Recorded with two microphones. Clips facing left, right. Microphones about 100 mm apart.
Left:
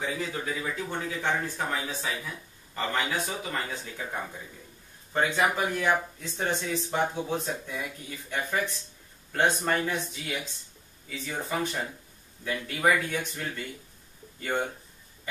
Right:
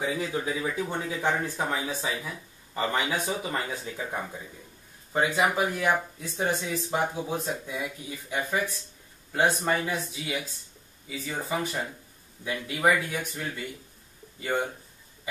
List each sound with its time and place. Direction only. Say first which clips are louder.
0.0 s speech: right 3 dB; 10° right (ahead or behind)
2.0 s speech: right 2 dB; centre (ahead or behind)
2.7 s a man's voice: right 2 dB; 15° right (ahead or behind)